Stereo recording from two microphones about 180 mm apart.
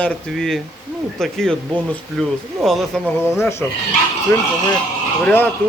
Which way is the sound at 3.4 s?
15° left (ahead or behind).